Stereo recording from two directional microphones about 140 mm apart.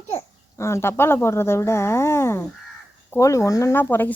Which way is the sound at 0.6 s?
20° left (ahead or behind).